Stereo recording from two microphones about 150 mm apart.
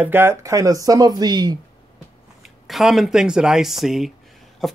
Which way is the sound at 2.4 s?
Centre (ahead or behind).